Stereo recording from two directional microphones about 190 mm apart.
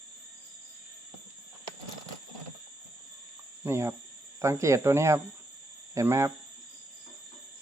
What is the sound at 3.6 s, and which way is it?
Speech, 15° right (ahead or behind).